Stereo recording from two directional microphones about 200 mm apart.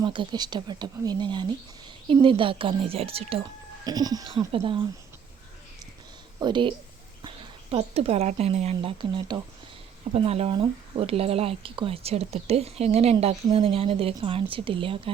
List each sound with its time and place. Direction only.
0.0 s speech: 25° right (ahead or behind)
6.4 s speech: 25° right (ahead or behind)